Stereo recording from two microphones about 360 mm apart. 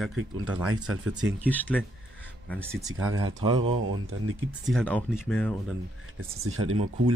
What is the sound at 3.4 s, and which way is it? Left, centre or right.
Speech, centre.